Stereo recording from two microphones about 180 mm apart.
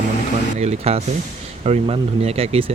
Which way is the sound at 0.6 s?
35° right (ahead or behind).